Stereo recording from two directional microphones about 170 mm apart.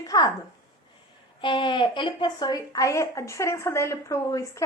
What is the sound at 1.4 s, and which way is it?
A woman's voice, 30° left (ahead or behind).